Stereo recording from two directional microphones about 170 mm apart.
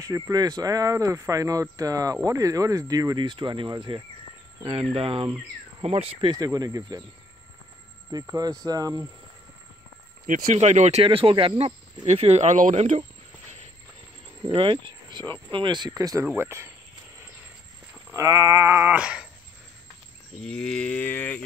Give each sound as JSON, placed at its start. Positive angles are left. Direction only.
{"t": 0.0, "sound": "speech", "side_deg": -20}
{"t": 6.3, "sound": "speech", "side_deg": -20}
{"t": 8.1, "sound": "speech", "side_deg": -20}
{"t": 10.2, "sound": "speech", "side_deg": -55}
{"t": 14.5, "sound": "speech", "side_deg": -30}
{"t": 16.3, "sound": "a sound", "side_deg": -15}
{"t": 18.1, "sound": "a sound", "side_deg": -20}
{"t": 20.3, "sound": "cattle", "side_deg": 5}